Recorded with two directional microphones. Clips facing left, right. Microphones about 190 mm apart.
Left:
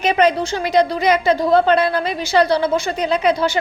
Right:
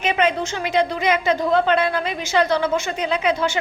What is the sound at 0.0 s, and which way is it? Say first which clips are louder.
A woman's voice: left 4 dB; 40° left (ahead or behind).